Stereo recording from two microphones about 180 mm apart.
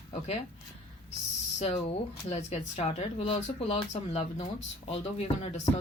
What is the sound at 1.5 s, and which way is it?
Speech, 35° left (ahead or behind).